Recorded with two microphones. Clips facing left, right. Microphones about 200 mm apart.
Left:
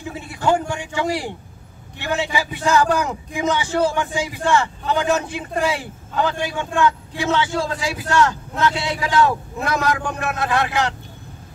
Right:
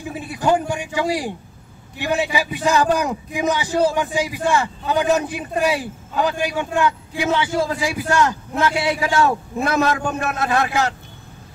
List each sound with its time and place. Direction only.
0.1 s a man's voice: 20° right (ahead or behind)